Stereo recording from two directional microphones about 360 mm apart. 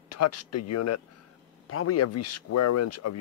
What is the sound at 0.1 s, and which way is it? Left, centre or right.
Speech, left.